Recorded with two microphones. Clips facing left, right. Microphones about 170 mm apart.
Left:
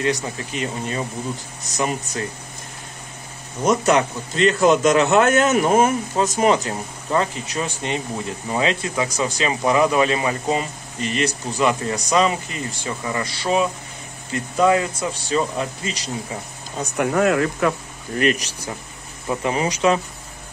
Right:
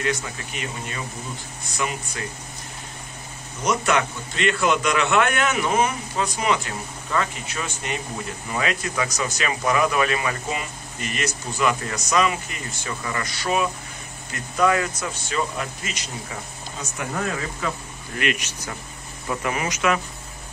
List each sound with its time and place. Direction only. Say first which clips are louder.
0.0 s a man's voice: left 4 dB; 30° left (ahead or behind)
3.6 s a man's voice: left 5 dB; 35° left (ahead or behind)
16.9 s speech: left 10 dB; 65° left (ahead or behind)
18.1 s a man's voice: left 6 dB; 35° left (ahead or behind)
19.2 s speech: left 4 dB; 25° left (ahead or behind)